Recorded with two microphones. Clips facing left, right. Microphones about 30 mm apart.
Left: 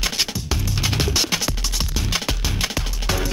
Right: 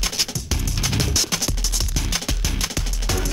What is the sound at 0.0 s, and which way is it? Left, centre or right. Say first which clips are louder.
Music: left 2 dB; centre.